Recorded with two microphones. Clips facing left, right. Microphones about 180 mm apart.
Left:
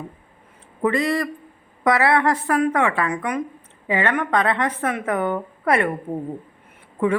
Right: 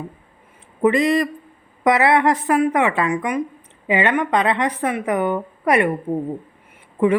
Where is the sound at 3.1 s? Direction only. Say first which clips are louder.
Right 3 dB; 10° right (ahead or behind).